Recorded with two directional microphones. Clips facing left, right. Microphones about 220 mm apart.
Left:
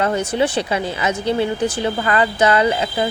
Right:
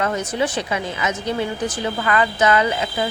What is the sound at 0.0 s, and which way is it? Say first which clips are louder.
Speech: left 3 dB; 30° left (ahead or behind).